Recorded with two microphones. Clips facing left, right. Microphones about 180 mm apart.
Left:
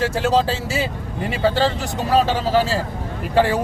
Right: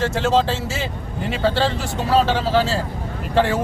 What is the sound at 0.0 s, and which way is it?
A man's voice, 10° left (ahead or behind).